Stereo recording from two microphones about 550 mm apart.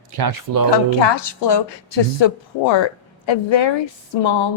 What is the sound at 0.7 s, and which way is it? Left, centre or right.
Speech, left.